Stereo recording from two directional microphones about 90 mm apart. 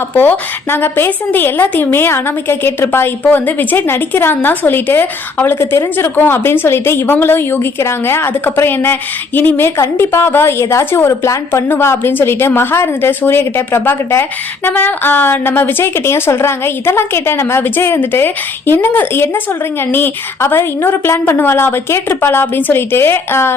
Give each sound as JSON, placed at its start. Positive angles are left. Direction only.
{"t": 0.1, "sound": "a woman's voice", "side_deg": 20}